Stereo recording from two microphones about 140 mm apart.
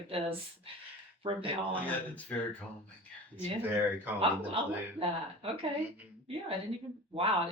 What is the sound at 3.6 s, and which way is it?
Speech, 10° right (ahead or behind).